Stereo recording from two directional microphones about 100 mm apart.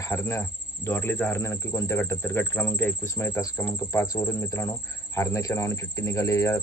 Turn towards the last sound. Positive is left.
turn(degrees=30)  # may be behind; listen again after turning